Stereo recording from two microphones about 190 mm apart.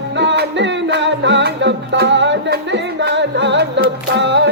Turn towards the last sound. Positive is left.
turn(degrees=-70)  # may be behind; listen again after turning